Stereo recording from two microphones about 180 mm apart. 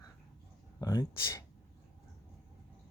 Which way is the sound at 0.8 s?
20° left (ahead or behind).